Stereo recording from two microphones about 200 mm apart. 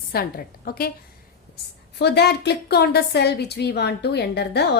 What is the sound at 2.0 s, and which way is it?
A woman's voice, 55° left (ahead or behind).